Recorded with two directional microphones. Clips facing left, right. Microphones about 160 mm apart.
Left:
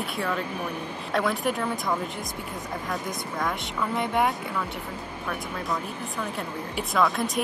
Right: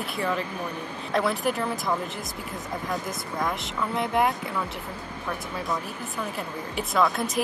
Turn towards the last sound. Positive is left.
turn(degrees=0)  # may be behind; listen again after turning